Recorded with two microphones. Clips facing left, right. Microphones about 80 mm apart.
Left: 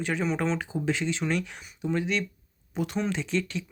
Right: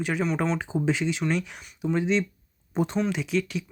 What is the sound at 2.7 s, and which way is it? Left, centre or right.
Speech, right.